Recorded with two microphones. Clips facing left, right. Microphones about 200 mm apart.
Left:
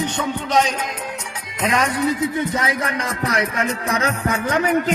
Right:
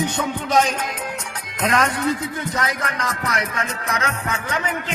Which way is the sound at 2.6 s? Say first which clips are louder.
Left 2 dB; 30° left (ahead or behind).